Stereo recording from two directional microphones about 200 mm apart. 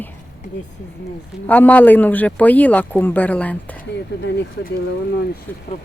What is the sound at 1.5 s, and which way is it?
A woman's voice, 10° left (ahead or behind).